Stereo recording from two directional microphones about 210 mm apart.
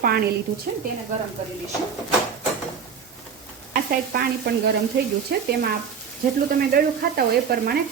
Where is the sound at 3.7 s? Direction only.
45° right (ahead or behind).